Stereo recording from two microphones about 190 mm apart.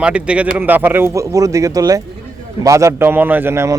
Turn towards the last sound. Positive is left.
turn(degrees=-15)  # may be behind; listen again after turning